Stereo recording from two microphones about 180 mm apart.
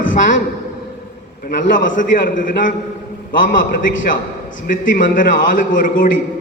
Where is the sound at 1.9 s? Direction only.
45° left (ahead or behind).